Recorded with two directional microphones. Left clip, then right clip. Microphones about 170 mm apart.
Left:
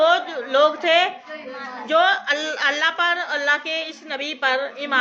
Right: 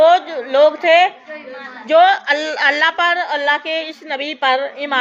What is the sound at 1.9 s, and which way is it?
A woman's voice, 35° right (ahead or behind).